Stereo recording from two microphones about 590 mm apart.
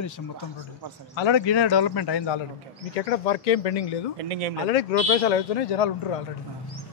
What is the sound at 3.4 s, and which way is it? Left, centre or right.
Speech, left.